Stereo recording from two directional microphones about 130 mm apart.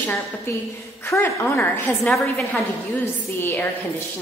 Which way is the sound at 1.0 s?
15° left (ahead or behind).